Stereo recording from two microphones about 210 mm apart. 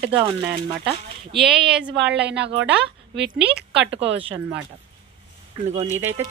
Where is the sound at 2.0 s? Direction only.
55° right (ahead or behind).